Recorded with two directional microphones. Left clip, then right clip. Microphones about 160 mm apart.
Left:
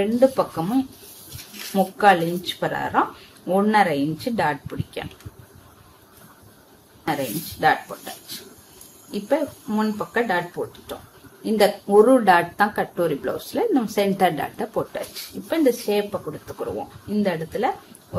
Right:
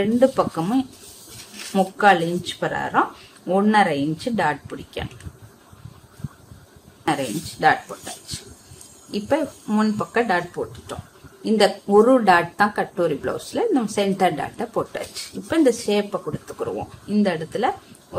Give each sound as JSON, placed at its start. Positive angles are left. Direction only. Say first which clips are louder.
{"t": 0.0, "sound": "speech", "louder": "even", "side_deg": -15}
{"t": 7.1, "sound": "speech", "louder": "right 2 dB", "side_deg": -15}
{"t": 7.9, "sound": "speech", "louder": "right 1 dB", "side_deg": 0}
{"t": 9.1, "sound": "speech", "louder": "right 1 dB", "side_deg": -20}
{"t": 15.0, "sound": "speech", "louder": "right 1 dB", "side_deg": -20}